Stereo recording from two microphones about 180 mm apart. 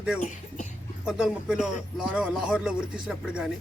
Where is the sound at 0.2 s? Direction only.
45° left (ahead or behind).